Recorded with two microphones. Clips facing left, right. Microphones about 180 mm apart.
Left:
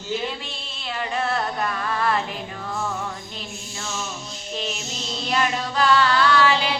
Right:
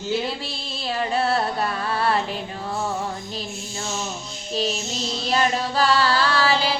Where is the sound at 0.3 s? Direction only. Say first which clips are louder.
Right 3 dB; 35° right (ahead or behind).